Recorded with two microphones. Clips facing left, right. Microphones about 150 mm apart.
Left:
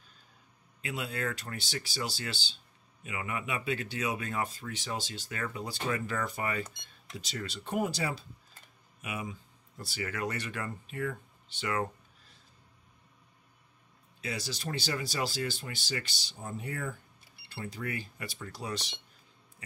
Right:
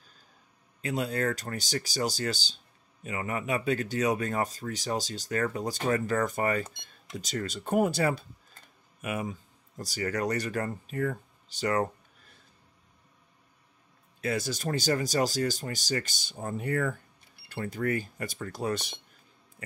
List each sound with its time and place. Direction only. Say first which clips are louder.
0.8 s speech: right 6 dB; 40° right (ahead or behind)
14.2 s speech: right 7 dB; 50° right (ahead or behind)